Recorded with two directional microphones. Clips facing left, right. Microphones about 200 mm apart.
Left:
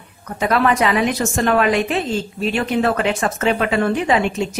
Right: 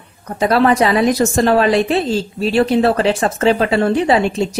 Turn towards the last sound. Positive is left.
turn(degrees=-35)  # may be behind; listen again after turning